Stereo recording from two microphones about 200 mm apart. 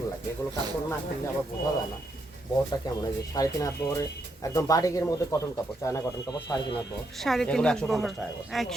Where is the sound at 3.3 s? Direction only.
15° left (ahead or behind).